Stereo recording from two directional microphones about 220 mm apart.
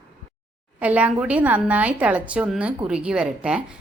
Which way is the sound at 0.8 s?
5° right (ahead or behind).